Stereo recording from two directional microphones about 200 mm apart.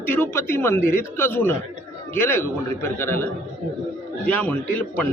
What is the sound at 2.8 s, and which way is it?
A man's voice, 10° left (ahead or behind).